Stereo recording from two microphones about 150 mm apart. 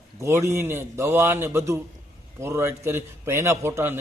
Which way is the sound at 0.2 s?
20° right (ahead or behind).